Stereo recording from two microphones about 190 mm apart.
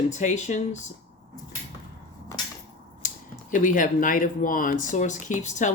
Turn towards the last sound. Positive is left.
turn(degrees=40)  # may be behind; listen again after turning